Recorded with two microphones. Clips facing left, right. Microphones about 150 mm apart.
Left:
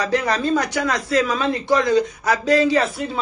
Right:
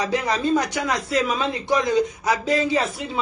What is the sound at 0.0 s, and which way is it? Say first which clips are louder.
Speech: left 2 dB; 15° right (ahead or behind).